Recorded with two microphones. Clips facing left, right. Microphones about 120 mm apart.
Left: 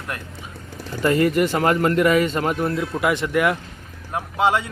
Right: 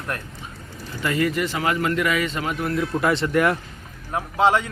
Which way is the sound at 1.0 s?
45° left (ahead or behind).